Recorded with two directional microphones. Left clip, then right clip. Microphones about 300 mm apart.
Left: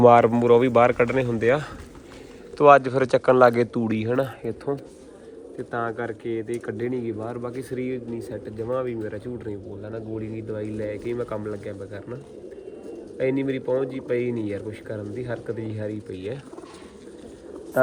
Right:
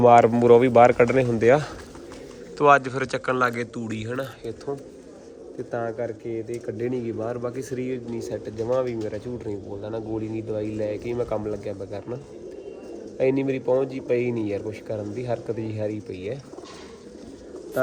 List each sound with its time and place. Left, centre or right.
0.0 s speech: centre; by 4.8 s left
5.7 s speech: centre
13.1 s speech: centre
16.1 s speech: left